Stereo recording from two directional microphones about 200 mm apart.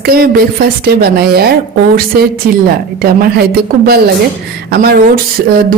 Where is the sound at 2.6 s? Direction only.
45° right (ahead or behind).